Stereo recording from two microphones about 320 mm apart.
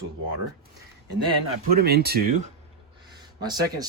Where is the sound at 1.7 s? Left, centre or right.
Right.